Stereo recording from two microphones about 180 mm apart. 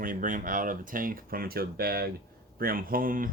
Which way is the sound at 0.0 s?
50° right (ahead or behind).